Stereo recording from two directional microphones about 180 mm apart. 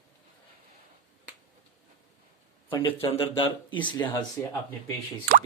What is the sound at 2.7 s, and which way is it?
Speech, 30° left (ahead or behind).